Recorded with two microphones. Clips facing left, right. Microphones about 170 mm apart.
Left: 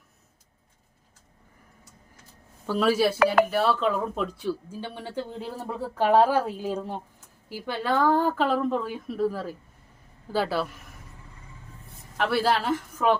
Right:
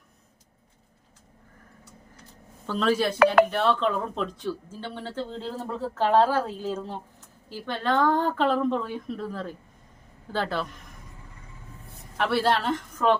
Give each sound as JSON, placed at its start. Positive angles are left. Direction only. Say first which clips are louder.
{"t": 2.6, "sound": "speech", "louder": "left 2 dB", "side_deg": 10}
{"t": 12.1, "sound": "a woman's voice", "louder": "even", "side_deg": 0}